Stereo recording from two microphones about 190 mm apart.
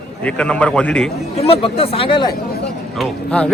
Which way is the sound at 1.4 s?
30° left (ahead or behind).